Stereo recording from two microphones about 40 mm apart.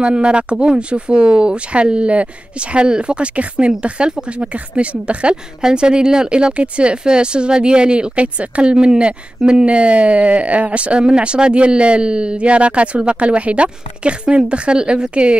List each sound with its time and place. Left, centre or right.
0.0 s speech: right